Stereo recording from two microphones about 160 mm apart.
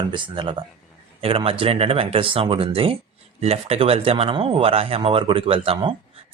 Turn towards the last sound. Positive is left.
turn(degrees=-30)  # may be behind; listen again after turning